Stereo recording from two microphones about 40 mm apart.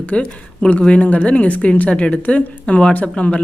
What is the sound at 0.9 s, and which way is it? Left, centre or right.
A woman's voice, left.